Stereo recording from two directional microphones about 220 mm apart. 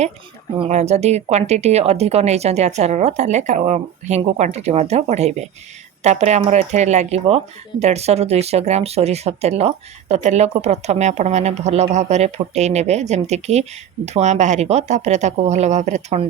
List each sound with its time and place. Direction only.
0.6 s speech: 30° right (ahead or behind)